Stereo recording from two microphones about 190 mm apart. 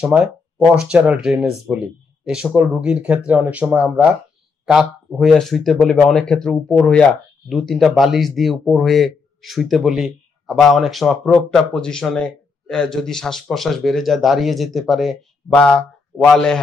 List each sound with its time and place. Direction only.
0.0 s speech: 5° right (ahead or behind)